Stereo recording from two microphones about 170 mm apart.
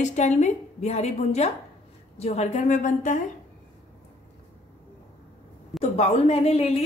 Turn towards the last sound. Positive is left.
turn(degrees=40)  # may be behind; listen again after turning